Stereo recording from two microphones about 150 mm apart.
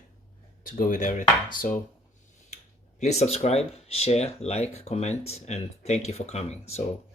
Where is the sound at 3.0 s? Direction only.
50° left (ahead or behind).